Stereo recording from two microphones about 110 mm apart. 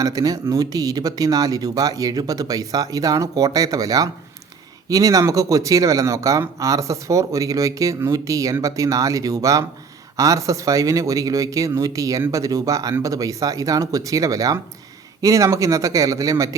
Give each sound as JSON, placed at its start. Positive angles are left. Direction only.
{"t": 0.0, "sound": "speech", "side_deg": -35}